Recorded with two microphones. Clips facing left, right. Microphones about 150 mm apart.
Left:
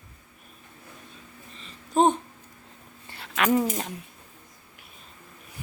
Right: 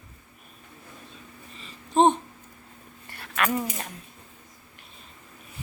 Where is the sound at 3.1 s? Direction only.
20° left (ahead or behind).